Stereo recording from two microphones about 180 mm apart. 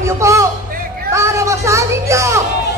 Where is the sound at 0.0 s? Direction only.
15° right (ahead or behind).